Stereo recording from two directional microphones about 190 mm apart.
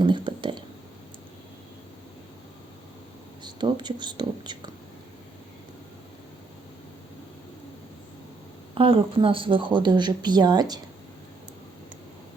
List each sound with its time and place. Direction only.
0.0 s a sound: 25° right (ahead or behind)
3.4 s speech: 25° right (ahead or behind)
8.7 s speech: 30° right (ahead or behind)